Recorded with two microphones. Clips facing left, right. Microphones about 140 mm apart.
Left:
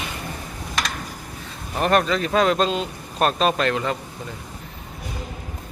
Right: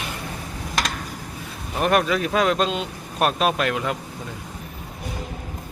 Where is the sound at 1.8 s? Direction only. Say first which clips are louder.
Even; 5° right (ahead or behind).